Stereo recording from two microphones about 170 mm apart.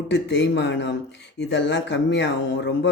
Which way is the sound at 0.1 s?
90° left.